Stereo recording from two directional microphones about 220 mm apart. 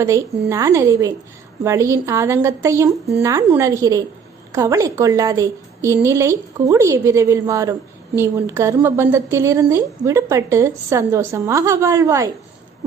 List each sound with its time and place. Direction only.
0.0 s a woman's voice: 15° right (ahead or behind)